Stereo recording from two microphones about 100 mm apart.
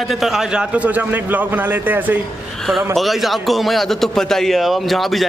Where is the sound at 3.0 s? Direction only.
Centre (ahead or behind).